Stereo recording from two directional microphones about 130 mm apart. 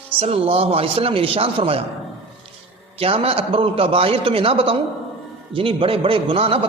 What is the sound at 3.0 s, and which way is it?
A man's voice, 45° right (ahead or behind).